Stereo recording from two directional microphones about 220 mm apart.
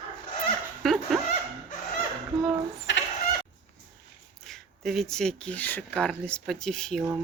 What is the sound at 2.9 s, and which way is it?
Cluck, 55° left (ahead or behind).